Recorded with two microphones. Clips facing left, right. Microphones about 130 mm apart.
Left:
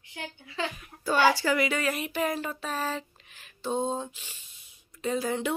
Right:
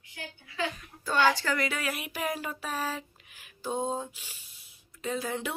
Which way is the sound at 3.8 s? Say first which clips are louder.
Left 2 dB; 5° right (ahead or behind).